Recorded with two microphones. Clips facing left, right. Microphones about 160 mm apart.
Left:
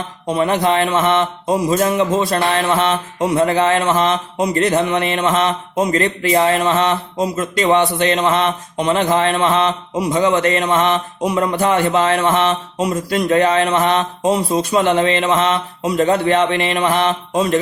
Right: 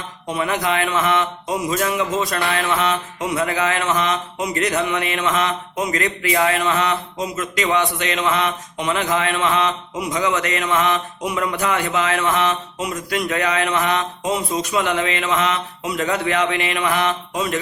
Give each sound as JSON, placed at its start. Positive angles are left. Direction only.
{"t": 0.3, "sound": "mantra", "side_deg": 35}